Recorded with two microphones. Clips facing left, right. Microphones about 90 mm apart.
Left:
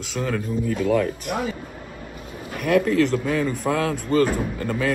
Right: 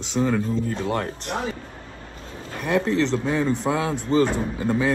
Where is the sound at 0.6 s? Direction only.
30° right (ahead or behind).